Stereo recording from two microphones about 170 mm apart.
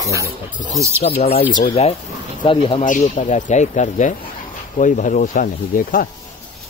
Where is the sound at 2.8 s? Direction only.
45° left (ahead or behind).